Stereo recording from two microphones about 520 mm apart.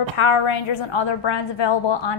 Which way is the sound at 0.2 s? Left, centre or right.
Left.